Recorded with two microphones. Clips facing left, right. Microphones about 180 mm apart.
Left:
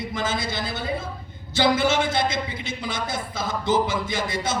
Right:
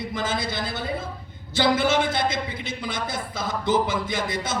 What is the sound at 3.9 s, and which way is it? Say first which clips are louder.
Speech: even; 55° right (ahead or behind).